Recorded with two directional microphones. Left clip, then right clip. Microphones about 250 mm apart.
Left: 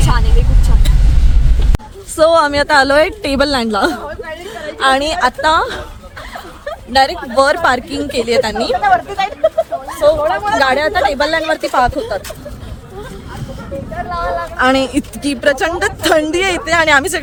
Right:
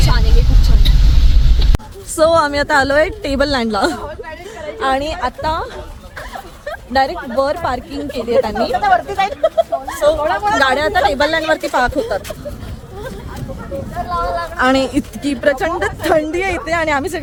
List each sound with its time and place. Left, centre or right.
1.7 s a woman's voice: centre; by 5.8 s left
6.9 s a woman's voice: left
8.8 s speech: right
10.6 s speech: centre
14.1 s a sound: right
14.6 s a woman's voice: centre; by 17.2 s left